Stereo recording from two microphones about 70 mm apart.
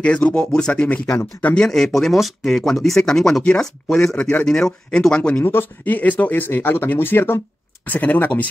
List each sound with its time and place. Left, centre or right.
0.0 s speech: centre
0.8 s speech: left
1.6 s speech: centre
4.2 s speech: centre
5.4 s speech: left